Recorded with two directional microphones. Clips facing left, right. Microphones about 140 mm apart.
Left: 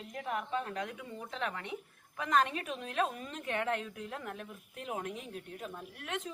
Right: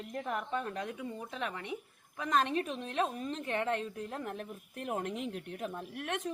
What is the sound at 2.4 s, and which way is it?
A woman's voice, 30° right (ahead or behind).